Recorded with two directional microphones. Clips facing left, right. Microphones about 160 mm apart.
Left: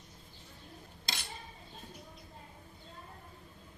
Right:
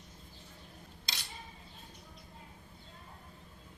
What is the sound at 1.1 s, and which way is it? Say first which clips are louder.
Cutlery: left 4 dB; 55° left (ahead or behind).